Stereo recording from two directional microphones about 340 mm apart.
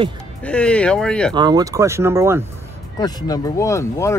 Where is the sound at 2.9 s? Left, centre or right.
Centre.